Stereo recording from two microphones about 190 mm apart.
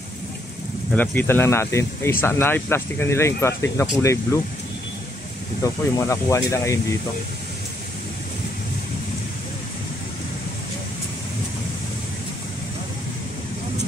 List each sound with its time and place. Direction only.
0.9 s speech: 10° left (ahead or behind)
5.6 s speech: 15° left (ahead or behind)